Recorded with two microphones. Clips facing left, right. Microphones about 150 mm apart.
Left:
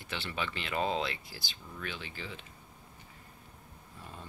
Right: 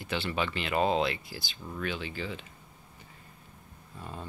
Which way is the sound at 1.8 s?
90° right.